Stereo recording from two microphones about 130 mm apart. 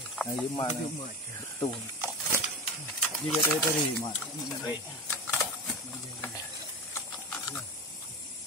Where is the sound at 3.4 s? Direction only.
35° left (ahead or behind).